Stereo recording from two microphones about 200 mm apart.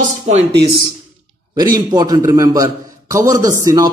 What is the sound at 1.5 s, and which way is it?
A man's voice, 20° right (ahead or behind).